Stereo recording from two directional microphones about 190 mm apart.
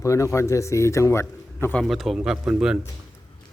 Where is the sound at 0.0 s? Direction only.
15° left (ahead or behind).